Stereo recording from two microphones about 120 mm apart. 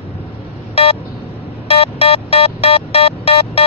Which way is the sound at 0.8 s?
55° left (ahead or behind).